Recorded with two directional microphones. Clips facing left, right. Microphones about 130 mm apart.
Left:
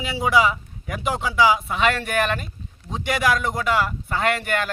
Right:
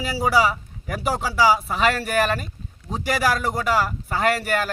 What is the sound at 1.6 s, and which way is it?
Speech, centre (ahead or behind).